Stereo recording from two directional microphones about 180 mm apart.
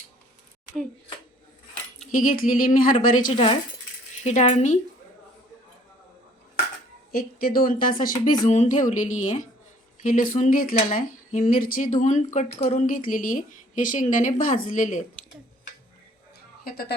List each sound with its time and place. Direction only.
2.1 s speech: 50° left (ahead or behind)
3.3 s speech: 30° left (ahead or behind)
7.1 s speech: 55° left (ahead or behind)
16.6 s speech: 60° left (ahead or behind)